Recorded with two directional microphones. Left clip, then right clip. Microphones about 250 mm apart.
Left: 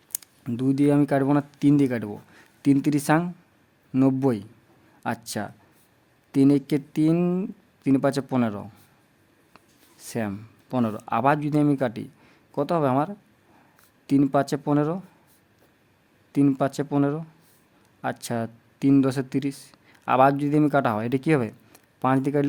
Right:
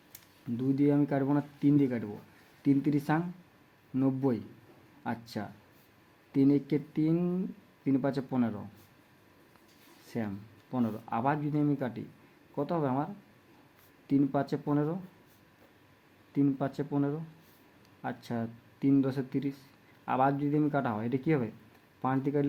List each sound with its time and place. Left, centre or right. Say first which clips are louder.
0.1 s speech: left 7 dB; left
10.1 s speech: left 8 dB; left
14.1 s speech: left 8 dB; left
16.3 s speech: left 8 dB; left